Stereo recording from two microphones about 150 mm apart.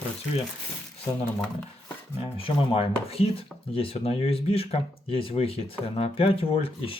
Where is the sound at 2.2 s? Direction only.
35° left (ahead or behind).